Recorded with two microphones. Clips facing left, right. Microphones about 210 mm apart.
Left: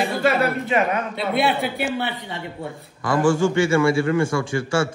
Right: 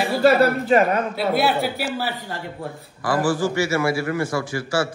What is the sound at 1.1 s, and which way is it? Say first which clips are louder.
A man's voice: right 1 dB; 5° right (ahead or behind).